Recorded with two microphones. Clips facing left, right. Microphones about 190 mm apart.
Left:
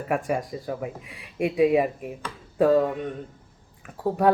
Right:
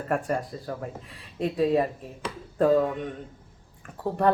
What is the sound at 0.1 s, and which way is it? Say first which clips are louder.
A woman's voice: left 2 dB; 10° left (ahead or behind).